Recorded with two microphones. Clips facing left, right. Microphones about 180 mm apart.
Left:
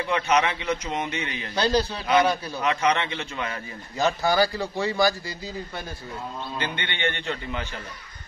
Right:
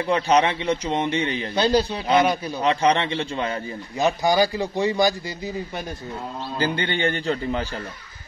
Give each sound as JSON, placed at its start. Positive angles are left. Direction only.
{"t": 0.0, "sound": "a man's voice", "side_deg": -30}
{"t": 1.5, "sound": "a man's voice", "side_deg": -20}
{"t": 2.6, "sound": "a man's voice", "side_deg": -30}
{"t": 4.0, "sound": "speech", "side_deg": -15}
{"t": 6.6, "sound": "a man's voice", "side_deg": -35}